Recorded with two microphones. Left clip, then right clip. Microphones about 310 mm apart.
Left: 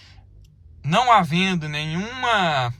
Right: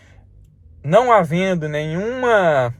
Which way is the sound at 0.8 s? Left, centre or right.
Centre.